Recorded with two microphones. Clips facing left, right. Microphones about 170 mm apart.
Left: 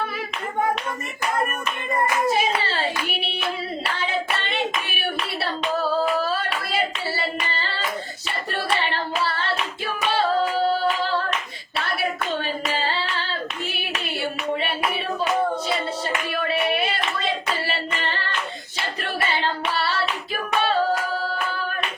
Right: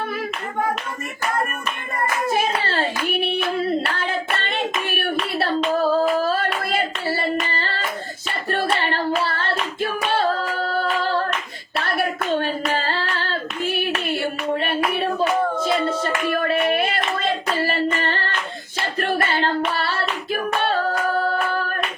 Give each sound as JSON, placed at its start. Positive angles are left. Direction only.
{"t": 2.3, "sound": "clapping", "side_deg": -55}
{"t": 3.6, "sound": "hands", "side_deg": -50}
{"t": 6.7, "sound": "hands", "side_deg": -50}
{"t": 8.4, "sound": "hands", "side_deg": -50}
{"t": 11.9, "sound": "hands", "side_deg": -55}
{"t": 15.8, "sound": "a sound", "side_deg": -50}
{"t": 19.3, "sound": "hands", "side_deg": -55}
{"t": 20.6, "sound": "music", "side_deg": -55}